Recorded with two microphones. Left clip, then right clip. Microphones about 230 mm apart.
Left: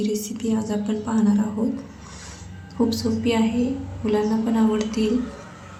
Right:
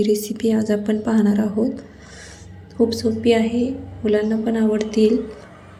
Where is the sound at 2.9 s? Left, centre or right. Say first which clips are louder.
Right 6 dB; centre.